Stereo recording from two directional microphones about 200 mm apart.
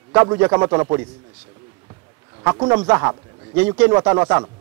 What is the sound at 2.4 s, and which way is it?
A man's voice, 15° right (ahead or behind).